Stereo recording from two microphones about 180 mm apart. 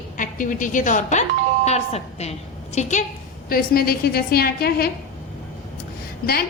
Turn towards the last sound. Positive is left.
turn(degrees=55)  # may be behind; listen again after turning